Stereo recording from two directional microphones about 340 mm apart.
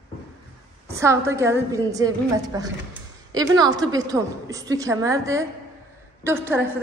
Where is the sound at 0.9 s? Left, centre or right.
Centre.